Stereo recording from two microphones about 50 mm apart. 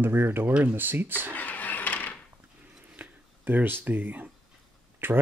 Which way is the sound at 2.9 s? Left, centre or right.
Right.